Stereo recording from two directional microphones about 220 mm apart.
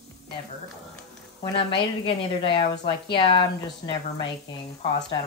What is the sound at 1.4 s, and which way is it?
A woman's voice, 25° left (ahead or behind).